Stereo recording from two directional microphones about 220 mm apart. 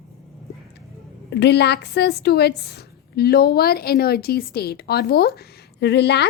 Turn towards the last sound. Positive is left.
turn(degrees=50)  # may be behind; listen again after turning